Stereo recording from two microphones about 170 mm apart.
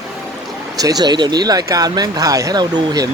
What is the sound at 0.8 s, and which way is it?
Speech, 20° right (ahead or behind).